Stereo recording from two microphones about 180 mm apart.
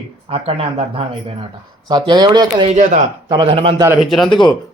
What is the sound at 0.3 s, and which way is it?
Speech, 30° right (ahead or behind).